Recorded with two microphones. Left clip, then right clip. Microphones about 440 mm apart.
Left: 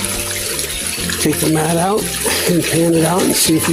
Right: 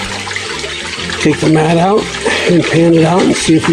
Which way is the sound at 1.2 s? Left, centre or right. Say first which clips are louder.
Right 6 dB; left.